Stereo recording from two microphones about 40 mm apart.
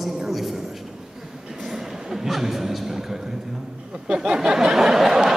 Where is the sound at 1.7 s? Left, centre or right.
Centre.